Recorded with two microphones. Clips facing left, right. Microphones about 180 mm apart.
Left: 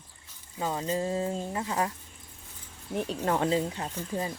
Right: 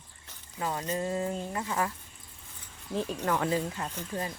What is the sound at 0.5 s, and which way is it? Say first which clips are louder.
Speech: left 2 dB; 25° left (ahead or behind).